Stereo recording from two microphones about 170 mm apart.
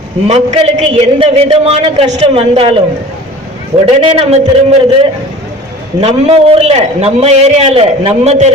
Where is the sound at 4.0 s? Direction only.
35° right (ahead or behind).